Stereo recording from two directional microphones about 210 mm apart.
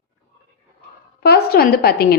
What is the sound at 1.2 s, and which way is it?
Speech, 50° left (ahead or behind).